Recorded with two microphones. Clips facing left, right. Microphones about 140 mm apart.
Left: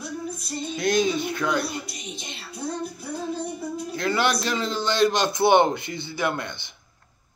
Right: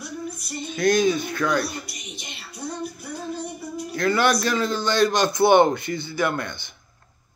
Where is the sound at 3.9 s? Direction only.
25° left (ahead or behind).